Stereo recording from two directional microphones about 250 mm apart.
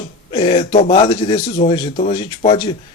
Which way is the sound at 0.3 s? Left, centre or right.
Left.